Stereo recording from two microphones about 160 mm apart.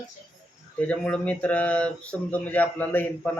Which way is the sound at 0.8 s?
10° left (ahead or behind).